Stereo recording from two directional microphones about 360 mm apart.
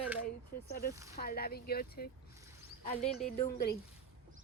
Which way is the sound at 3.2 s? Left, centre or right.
Left.